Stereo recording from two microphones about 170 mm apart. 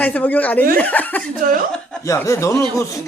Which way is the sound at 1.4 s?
55° right (ahead or behind).